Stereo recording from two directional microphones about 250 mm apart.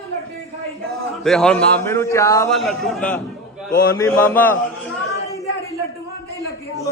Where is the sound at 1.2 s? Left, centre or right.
Centre.